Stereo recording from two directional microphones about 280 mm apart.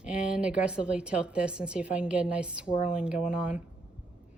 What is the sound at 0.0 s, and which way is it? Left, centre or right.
Speech, centre.